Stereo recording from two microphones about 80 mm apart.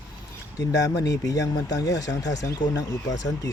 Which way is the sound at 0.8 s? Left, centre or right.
Left.